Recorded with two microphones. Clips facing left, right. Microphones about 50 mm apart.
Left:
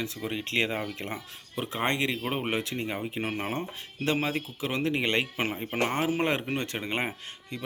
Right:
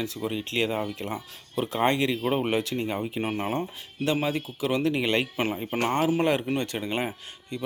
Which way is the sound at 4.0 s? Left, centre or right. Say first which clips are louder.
Right 2 dB; left.